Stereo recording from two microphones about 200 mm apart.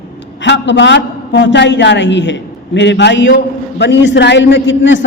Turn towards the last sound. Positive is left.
turn(degrees=65)  # may be behind; listen again after turning